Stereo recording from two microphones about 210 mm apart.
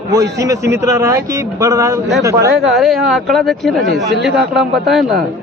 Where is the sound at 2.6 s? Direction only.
Centre (ahead or behind).